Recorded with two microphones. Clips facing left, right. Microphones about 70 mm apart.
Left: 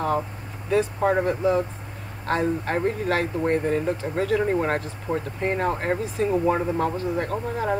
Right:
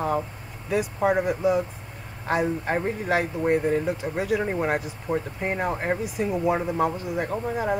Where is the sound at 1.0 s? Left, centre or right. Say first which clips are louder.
Right 3 dB; centre.